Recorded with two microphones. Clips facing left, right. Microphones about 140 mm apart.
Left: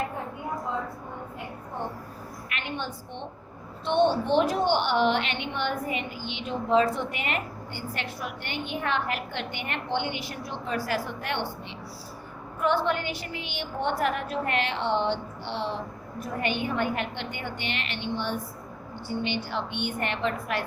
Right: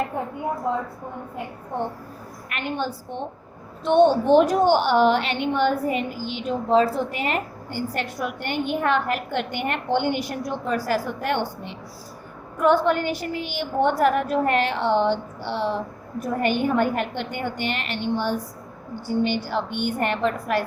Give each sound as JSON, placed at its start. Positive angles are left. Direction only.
{"t": 2.5, "sound": "a woman's voice", "side_deg": -45}
{"t": 12.6, "sound": "a woman's voice", "side_deg": -45}